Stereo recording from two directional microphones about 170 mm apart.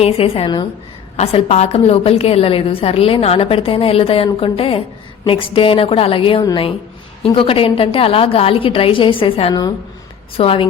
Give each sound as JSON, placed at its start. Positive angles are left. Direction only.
{"t": 0.0, "sound": "a woman's voice", "side_deg": 35}
{"t": 1.1, "sound": "a woman's voice", "side_deg": 40}